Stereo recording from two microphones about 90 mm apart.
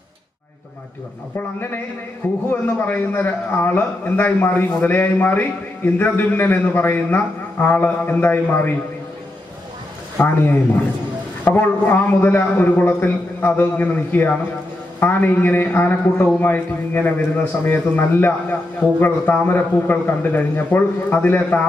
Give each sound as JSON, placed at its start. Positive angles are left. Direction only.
{"t": 2.2, "sound": "a man's voice", "side_deg": 25}
{"t": 10.1, "sound": "a man's voice", "side_deg": 20}